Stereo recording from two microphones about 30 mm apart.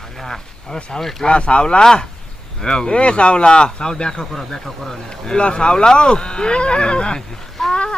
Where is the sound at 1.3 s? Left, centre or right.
Left.